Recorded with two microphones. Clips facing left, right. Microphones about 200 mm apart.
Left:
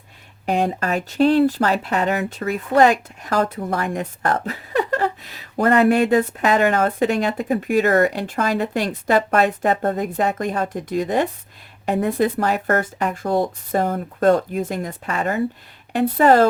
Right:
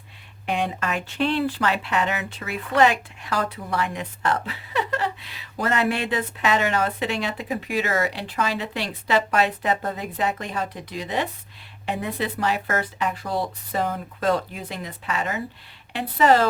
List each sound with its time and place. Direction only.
0.4 s speech: 40° left (ahead or behind)